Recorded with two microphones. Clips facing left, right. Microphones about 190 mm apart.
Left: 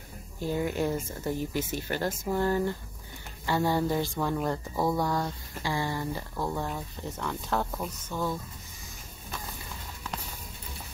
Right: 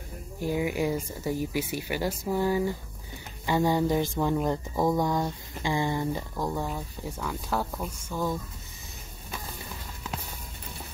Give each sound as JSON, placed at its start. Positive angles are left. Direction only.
{"t": 0.4, "sound": "speech", "side_deg": -10}